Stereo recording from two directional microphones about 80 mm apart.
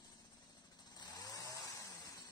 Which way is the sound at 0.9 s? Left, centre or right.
Left.